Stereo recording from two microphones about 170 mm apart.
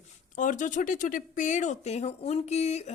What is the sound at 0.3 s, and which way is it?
Speech, 50° left (ahead or behind).